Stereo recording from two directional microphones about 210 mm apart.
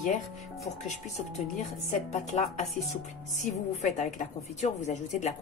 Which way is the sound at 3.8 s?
35° left (ahead or behind).